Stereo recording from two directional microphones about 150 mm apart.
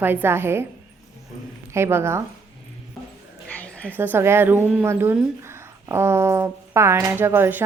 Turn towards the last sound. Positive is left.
turn(degrees=-15)  # may be behind; listen again after turning